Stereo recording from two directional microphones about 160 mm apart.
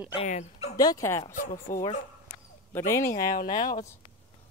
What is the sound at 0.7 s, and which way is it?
Speech, 25° left (ahead or behind).